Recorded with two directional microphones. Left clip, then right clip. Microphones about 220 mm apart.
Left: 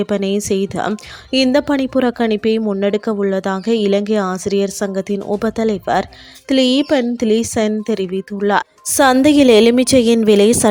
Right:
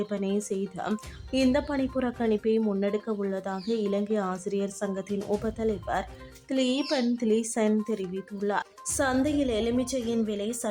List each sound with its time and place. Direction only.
0.0 s speech: 35° left (ahead or behind)